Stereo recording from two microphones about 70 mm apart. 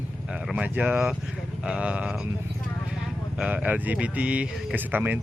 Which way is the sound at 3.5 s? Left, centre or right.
Right.